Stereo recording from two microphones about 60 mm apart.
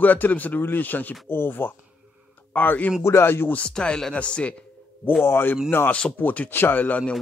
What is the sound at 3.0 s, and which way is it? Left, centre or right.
Speech, left.